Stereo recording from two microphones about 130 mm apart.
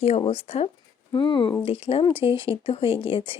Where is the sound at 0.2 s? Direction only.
50° left (ahead or behind).